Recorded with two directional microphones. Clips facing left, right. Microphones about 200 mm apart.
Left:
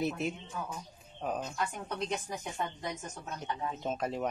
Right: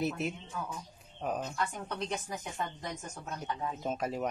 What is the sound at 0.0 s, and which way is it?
Speech, centre (ahead or behind).